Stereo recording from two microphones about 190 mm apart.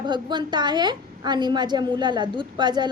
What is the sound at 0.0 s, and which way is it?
A woman's voice, 25° right (ahead or behind).